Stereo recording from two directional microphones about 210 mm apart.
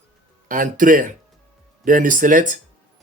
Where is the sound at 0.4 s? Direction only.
40° right (ahead or behind).